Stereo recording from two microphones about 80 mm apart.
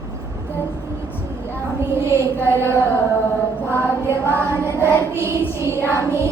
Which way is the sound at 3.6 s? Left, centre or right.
Right.